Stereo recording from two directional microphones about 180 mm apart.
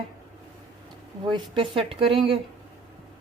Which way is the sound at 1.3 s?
30° right (ahead or behind).